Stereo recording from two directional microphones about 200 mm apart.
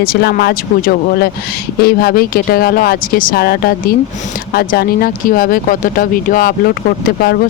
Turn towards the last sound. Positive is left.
turn(degrees=50)  # may be behind; listen again after turning